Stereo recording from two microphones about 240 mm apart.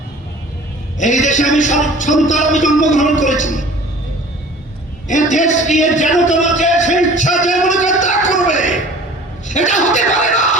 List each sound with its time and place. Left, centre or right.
0.9 s a man's voice: left
5.0 s a man's voice: left
8.3 s a sound: left
9.5 s speech: left